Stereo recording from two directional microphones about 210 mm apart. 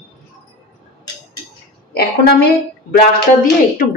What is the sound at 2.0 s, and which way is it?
A woman's voice, 50° left (ahead or behind).